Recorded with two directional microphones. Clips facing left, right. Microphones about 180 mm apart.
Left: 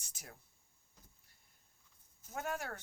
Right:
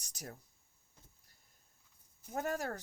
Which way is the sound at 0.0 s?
40° right (ahead or behind).